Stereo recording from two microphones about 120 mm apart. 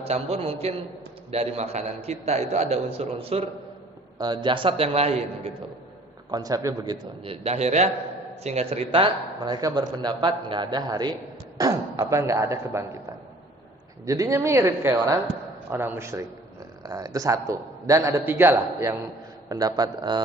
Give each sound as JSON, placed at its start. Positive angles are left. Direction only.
{"t": 0.0, "sound": "a man's voice", "side_deg": -60}
{"t": 4.2, "sound": "a man's voice", "side_deg": -40}
{"t": 6.3, "sound": "a man's voice", "side_deg": -30}
{"t": 7.3, "sound": "a man's voice", "side_deg": -60}
{"t": 9.4, "sound": "a man's voice", "side_deg": -35}
{"t": 14.0, "sound": "a man's voice", "side_deg": -30}
{"t": 19.5, "sound": "a man's voice", "side_deg": -35}